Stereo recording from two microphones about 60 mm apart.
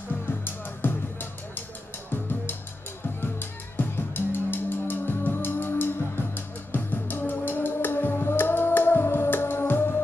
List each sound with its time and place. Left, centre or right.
0.8 s music: left
3.2 s music: left